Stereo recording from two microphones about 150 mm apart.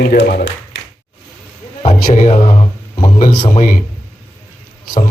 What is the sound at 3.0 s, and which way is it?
Speech, 65° left (ahead or behind).